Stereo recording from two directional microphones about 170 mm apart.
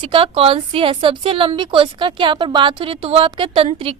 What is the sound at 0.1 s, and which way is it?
A woman's voice, 35° right (ahead or behind).